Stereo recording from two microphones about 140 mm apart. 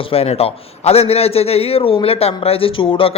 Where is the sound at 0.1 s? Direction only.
45° left (ahead or behind).